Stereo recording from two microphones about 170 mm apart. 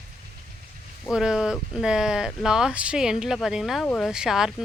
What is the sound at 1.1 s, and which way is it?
Speech, 5° right (ahead or behind).